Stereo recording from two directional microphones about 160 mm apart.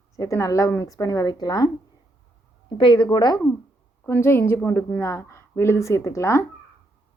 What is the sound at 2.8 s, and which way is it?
Speech, 30° left (ahead or behind).